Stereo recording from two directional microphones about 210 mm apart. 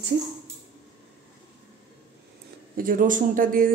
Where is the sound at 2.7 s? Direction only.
40° right (ahead or behind).